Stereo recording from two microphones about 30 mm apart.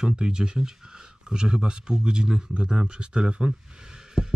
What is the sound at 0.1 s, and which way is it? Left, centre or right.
Speech, right.